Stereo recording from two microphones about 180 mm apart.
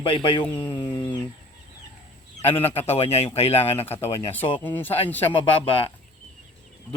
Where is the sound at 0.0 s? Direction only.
30° left (ahead or behind).